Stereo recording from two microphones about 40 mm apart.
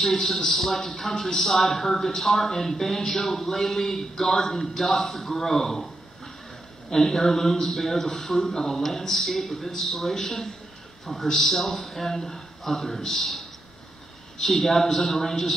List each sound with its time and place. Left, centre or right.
0.4 s a man's voice: left
0.7 s a man's voice: centre
6.9 s a man's voice: centre